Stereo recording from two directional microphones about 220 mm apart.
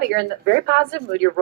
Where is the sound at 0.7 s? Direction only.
55° right (ahead or behind).